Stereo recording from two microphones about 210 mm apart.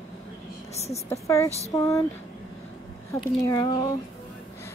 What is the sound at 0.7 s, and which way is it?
Speech, 30° left (ahead or behind).